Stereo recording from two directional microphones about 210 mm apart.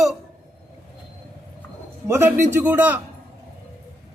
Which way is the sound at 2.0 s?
10° right (ahead or behind).